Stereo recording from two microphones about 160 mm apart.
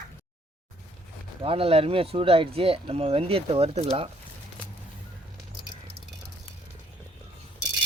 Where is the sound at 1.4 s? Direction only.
35° right (ahead or behind).